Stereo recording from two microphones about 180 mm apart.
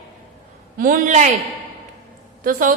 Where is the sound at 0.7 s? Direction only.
50° right (ahead or behind).